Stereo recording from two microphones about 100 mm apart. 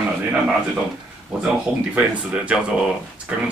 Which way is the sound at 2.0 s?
10° right (ahead or behind).